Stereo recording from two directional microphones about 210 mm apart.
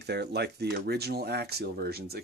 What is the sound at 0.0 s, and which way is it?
Speech, 50° right (ahead or behind).